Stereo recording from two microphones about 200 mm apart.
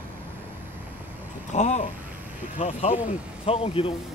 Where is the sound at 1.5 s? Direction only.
35° left (ahead or behind).